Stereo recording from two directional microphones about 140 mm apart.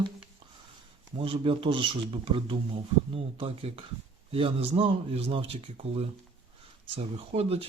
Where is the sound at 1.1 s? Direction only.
40° right (ahead or behind).